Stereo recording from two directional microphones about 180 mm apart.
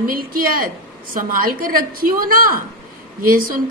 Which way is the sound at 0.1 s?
50° right (ahead or behind).